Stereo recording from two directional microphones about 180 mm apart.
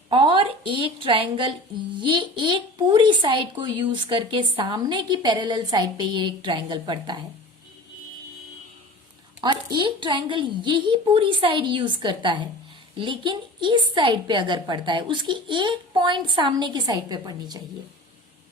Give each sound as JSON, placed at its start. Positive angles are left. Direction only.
{"t": 0.1, "sound": "a woman's voice", "side_deg": -30}
{"t": 9.4, "sound": "a woman's voice", "side_deg": -25}